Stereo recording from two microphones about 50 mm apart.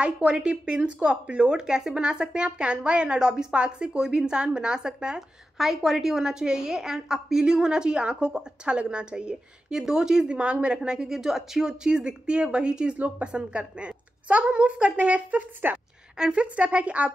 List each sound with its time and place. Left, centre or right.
0.0 s a woman's voice: centre
5.6 s a woman's voice: centre; by 15.4 s right
15.6 s a woman's voice: right
16.2 s speech: right